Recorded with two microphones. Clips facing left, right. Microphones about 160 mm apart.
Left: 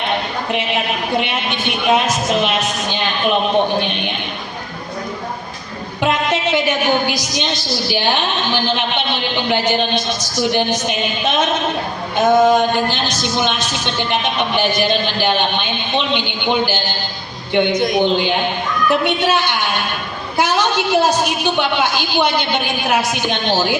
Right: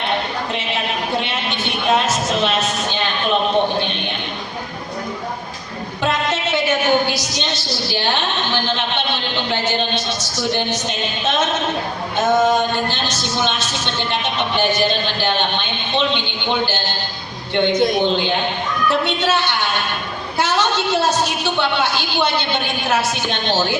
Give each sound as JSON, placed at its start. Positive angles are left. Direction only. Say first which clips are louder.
{"t": 0.5, "sound": "a woman's voice", "louder": "left 6 dB", "side_deg": 15}
{"t": 3.8, "sound": "a sound", "louder": "left 2 dB", "side_deg": 15}
{"t": 6.0, "sound": "a woman's voice", "louder": "left 3 dB", "side_deg": 15}